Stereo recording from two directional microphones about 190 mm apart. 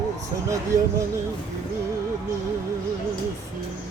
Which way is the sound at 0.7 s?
15° right (ahead or behind).